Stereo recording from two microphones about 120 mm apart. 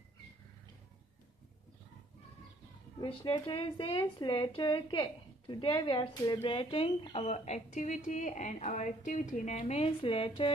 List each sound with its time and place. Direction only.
3.0 s a woman's voice: 50° left (ahead or behind); by 9.6 s 85° left
9.7 s a woman's voice: 50° left (ahead or behind)